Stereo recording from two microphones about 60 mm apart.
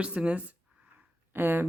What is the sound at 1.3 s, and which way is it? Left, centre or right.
Speech, right.